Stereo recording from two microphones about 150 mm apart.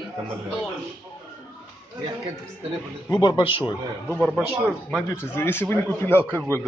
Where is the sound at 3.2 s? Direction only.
30° left (ahead or behind).